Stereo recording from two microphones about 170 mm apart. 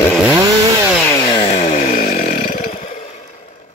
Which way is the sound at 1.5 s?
40° left (ahead or behind).